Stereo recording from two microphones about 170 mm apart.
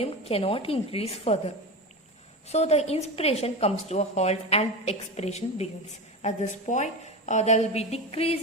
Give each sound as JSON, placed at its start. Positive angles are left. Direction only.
{"t": 0.0, "sound": "a woman's voice", "side_deg": 35}
{"t": 2.5, "sound": "a woman's voice", "side_deg": 40}